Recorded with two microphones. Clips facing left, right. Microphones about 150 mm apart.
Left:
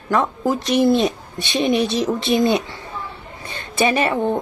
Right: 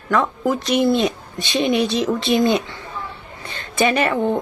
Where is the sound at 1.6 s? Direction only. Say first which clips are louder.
Even; 20° right (ahead or behind).